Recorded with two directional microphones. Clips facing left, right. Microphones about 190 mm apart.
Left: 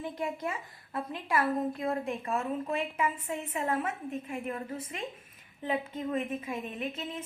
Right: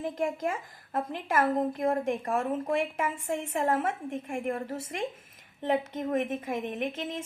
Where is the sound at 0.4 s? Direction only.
50° right (ahead or behind).